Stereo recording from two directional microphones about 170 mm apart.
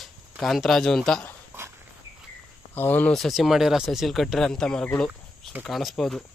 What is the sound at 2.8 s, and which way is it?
Speech, 10° left (ahead or behind).